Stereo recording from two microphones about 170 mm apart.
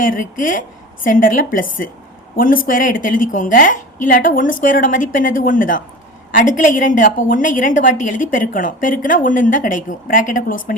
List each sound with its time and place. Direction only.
0.0 s a woman's voice: 50° left (ahead or behind)